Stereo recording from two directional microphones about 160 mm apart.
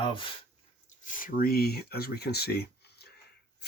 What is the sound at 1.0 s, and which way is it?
Speech, 55° left (ahead or behind).